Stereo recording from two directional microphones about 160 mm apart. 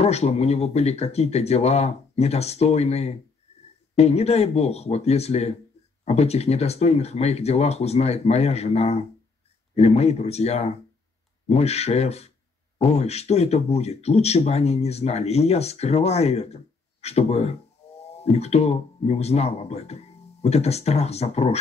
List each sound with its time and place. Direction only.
0.0 s speech: 40° left (ahead or behind)